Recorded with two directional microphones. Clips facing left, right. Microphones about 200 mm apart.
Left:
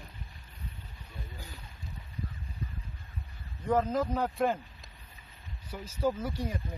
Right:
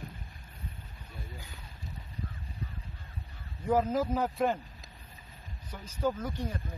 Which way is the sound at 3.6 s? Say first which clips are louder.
Even; 5° right (ahead or behind).